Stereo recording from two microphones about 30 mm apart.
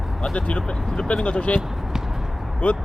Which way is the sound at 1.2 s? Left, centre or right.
Left.